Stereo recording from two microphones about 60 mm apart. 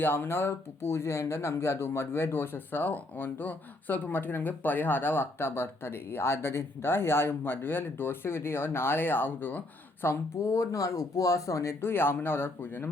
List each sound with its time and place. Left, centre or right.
0.0 s speech: left
10.1 s speech: left